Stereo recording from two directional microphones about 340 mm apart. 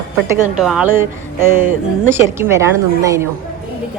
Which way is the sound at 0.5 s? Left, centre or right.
Centre.